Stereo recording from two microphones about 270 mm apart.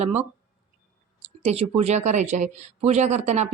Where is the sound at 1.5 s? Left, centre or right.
Right.